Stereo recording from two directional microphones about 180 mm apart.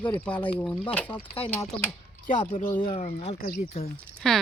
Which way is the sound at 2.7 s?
30° left (ahead or behind).